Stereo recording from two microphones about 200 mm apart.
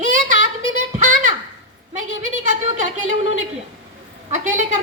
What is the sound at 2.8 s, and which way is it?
A woman's voice, 40° right (ahead or behind).